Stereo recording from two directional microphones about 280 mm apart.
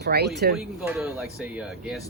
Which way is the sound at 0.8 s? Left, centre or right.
Centre.